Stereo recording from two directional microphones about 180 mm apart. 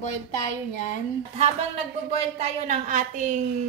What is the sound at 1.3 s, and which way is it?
Speech, 35° right (ahead or behind).